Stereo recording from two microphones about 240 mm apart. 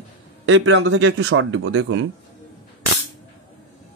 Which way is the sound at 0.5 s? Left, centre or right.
Right.